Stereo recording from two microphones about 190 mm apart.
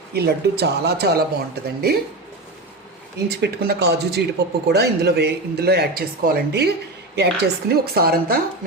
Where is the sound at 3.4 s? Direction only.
55° right (ahead or behind).